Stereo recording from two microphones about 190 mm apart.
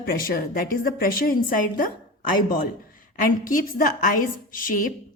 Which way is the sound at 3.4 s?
45° left (ahead or behind).